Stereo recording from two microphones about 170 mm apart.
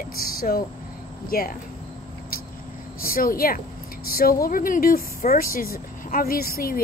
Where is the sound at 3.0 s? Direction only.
55° left (ahead or behind).